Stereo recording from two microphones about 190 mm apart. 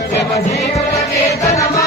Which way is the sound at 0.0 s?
60° left (ahead or behind).